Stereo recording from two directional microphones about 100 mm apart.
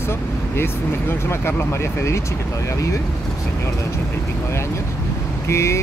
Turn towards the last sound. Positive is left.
turn(degrees=30)  # may be behind; listen again after turning